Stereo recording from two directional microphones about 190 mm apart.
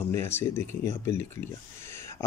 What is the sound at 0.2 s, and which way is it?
Speech, 10° left (ahead or behind).